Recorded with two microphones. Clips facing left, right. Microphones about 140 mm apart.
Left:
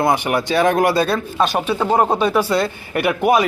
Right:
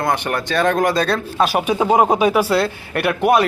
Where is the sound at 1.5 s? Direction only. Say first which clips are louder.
Right 2 dB; 10° right (ahead or behind).